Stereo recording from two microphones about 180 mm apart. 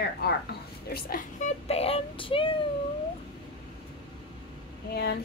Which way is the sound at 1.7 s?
35° left (ahead or behind).